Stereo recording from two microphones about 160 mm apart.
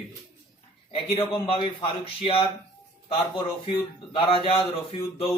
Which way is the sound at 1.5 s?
35° left (ahead or behind).